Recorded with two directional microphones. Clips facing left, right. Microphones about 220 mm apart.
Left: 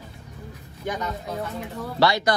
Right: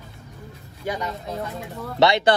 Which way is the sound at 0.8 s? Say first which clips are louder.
Right 1 dB; 10° right (ahead or behind).